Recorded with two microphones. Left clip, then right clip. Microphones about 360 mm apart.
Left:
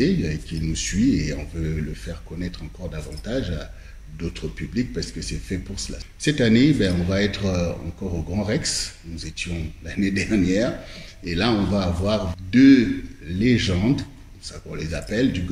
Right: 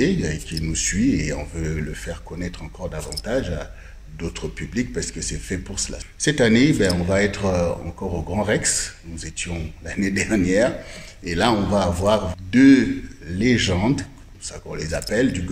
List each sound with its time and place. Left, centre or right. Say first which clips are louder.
0.0 s speech: right 1 dB; centre
1.8 s speech: right 3 dB; right
3.3 s speech: right 3 dB; centre
8.0 s speech: right 4 dB; right
8.5 s speech: right 2 dB; right